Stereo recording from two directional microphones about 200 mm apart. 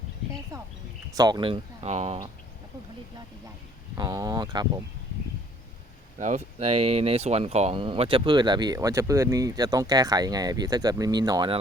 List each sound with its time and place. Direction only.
0.5 s speech: 15° right (ahead or behind); by 2.1 s 35° right (ahead or behind)
3.9 s speech: 20° right (ahead or behind)
6.1 s speech: 35° right (ahead or behind)